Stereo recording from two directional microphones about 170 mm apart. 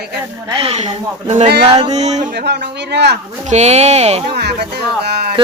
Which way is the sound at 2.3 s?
80° right.